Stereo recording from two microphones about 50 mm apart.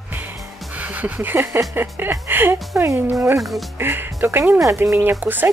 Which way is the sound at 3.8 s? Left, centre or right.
Right.